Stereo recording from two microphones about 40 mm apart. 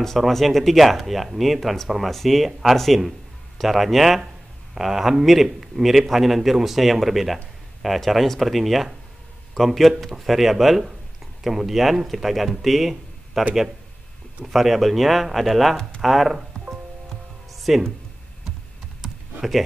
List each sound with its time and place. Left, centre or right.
0.0 s a man's voice: centre
14.4 s a man's voice: centre
17.6 s music: centre
18.9 s computer keyboard: centre